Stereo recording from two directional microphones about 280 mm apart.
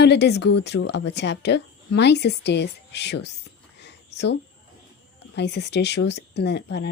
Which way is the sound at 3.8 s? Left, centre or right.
Left.